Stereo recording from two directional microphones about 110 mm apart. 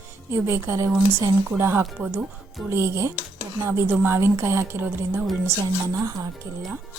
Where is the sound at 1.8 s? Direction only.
10° right (ahead or behind).